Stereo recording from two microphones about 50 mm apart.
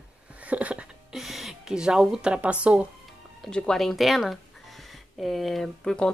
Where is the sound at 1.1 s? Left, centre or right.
Centre.